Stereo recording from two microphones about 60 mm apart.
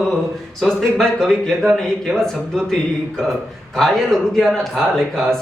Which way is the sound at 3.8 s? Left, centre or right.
Centre.